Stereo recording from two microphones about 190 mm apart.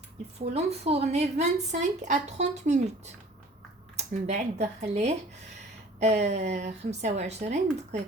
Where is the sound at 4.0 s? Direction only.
35° right (ahead or behind).